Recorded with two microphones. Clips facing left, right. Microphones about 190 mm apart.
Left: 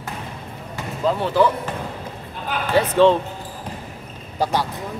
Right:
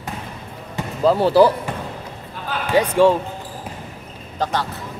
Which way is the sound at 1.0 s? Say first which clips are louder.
Right 5 dB; 35° right (ahead or behind).